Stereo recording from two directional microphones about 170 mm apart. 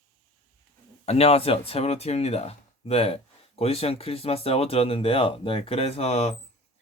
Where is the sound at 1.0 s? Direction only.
35° left (ahead or behind).